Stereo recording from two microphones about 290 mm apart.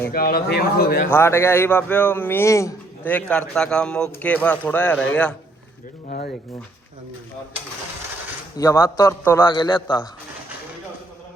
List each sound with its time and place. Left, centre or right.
0.1 s speech: left
1.1 s a man's voice: centre
6.1 s speech: left
8.5 s a man's voice: centre